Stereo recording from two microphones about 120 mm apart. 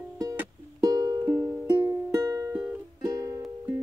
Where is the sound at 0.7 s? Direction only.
30° right (ahead or behind).